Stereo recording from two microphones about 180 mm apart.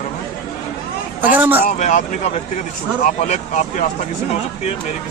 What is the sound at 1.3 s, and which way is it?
Speech, 10° right (ahead or behind).